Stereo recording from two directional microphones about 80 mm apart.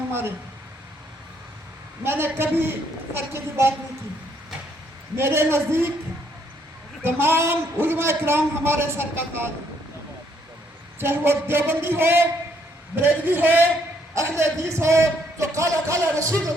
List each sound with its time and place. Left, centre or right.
0.1 s speech: right
2.0 s a man's voice: right
5.1 s a man's voice: right
7.0 s a man's voice: right
11.0 s a man's voice: right
14.2 s a man's voice: right